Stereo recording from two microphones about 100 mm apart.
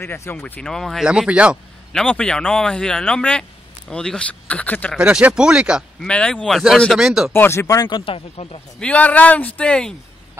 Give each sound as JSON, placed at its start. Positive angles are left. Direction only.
{"t": 0.0, "sound": "speech", "side_deg": 20}
{"t": 1.0, "sound": "speech", "side_deg": -10}
{"t": 1.9, "sound": "speech", "side_deg": 10}
{"t": 4.9, "sound": "speech", "side_deg": -10}
{"t": 5.9, "sound": "speech", "side_deg": 10}
{"t": 7.0, "sound": "speech", "side_deg": -5}
{"t": 7.3, "sound": "speech", "side_deg": 25}
{"t": 7.6, "sound": "speech", "side_deg": 35}
{"t": 7.9, "sound": "speech", "side_deg": 65}
{"t": 8.7, "sound": "speech", "side_deg": 15}